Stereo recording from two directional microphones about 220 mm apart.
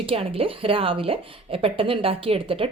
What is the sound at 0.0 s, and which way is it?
A woman's voice, 25° right (ahead or behind).